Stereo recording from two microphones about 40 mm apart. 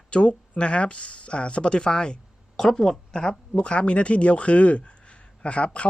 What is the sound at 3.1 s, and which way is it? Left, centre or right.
Speech, left.